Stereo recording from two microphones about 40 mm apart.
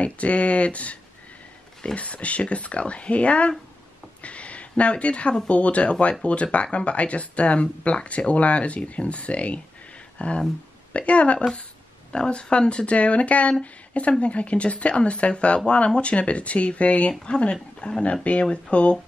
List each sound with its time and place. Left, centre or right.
0.0 s speech: left
2.0 s speech: left
4.2 s a sound: left
5.5 s speech: left